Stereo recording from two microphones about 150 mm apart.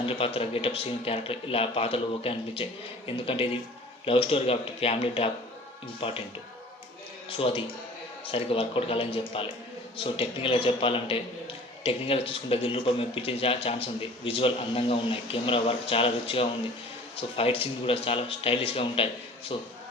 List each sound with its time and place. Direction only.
0.0 s a man's voice: 40° left (ahead or behind)
7.3 s a man's voice: 35° left (ahead or behind)